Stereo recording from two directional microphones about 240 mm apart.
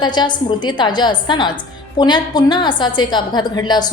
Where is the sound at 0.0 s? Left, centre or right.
Centre.